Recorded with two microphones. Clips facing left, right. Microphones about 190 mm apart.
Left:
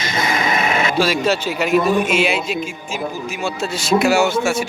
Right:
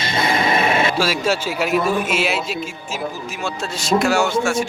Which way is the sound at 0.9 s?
5° right (ahead or behind).